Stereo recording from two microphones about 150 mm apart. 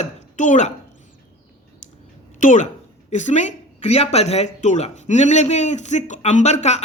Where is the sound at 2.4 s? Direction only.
60° left (ahead or behind).